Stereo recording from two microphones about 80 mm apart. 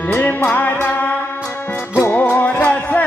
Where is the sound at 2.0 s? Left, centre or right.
Left.